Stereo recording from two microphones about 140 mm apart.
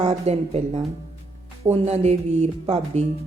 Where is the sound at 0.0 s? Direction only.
50° right (ahead or behind).